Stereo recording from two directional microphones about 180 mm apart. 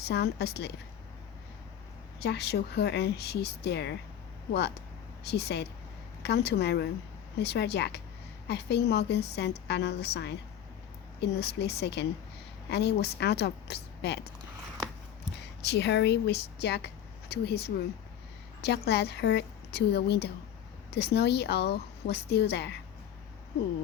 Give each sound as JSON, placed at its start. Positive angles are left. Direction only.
{"t": 0.1, "sound": "a woman's voice", "side_deg": 65}
{"t": 2.2, "sound": "a woman's voice", "side_deg": 65}
{"t": 5.2, "sound": "a woman's voice", "side_deg": 65}
{"t": 15.6, "sound": "a woman's voice", "side_deg": 70}